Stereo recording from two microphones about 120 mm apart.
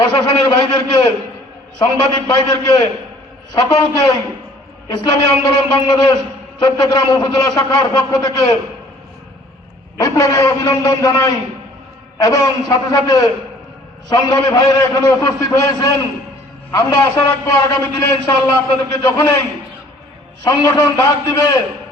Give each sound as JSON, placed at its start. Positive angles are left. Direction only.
{"t": 0.0, "sound": "a man's voice", "side_deg": 40}
{"t": 10.0, "sound": "a man's voice", "side_deg": 30}
{"t": 17.0, "sound": "a man's voice", "side_deg": 30}
{"t": 20.4, "sound": "a man's voice", "side_deg": 30}